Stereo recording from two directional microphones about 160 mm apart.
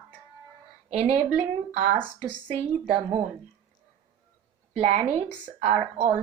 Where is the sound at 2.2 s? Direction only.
35° right (ahead or behind).